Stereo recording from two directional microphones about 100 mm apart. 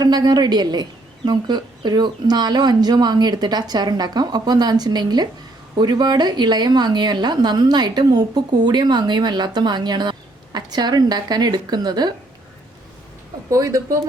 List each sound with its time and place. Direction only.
0.0 s a woman's voice: 40° right (ahead or behind)
13.5 s speech: 35° right (ahead or behind)